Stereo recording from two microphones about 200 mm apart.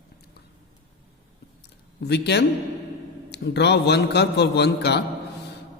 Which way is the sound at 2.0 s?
55° left (ahead or behind).